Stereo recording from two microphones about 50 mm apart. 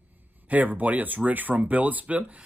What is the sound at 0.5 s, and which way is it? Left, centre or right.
Speech, right.